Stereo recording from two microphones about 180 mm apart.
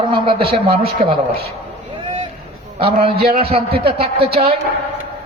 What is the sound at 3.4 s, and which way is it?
A man's voice, 30° right (ahead or behind).